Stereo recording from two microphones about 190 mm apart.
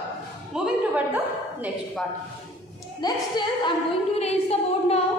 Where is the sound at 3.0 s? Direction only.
20° left (ahead or behind).